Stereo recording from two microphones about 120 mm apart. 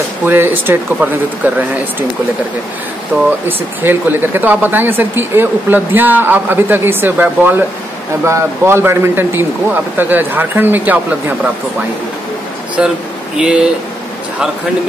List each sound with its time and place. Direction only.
0.2 s speech: 15° right (ahead or behind)
3.3 s speech: 15° right (ahead or behind)
13.4 s speech: 10° right (ahead or behind)